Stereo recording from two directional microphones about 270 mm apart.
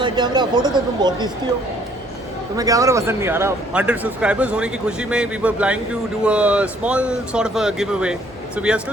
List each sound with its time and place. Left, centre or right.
0.0 s speech: centre
2.6 s a man's voice: centre